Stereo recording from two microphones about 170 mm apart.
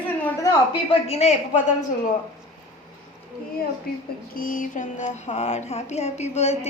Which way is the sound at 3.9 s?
65° left (ahead or behind).